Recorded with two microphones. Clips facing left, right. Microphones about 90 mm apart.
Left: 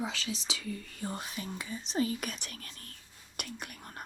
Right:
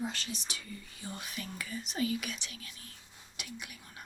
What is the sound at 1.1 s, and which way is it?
Speech, 30° left (ahead or behind).